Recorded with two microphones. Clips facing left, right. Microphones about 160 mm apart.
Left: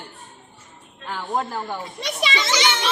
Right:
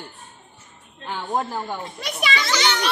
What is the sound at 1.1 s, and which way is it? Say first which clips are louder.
Speech: even; 5° right (ahead or behind).